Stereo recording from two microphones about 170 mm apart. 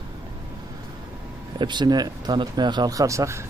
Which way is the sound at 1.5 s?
25° right (ahead or behind).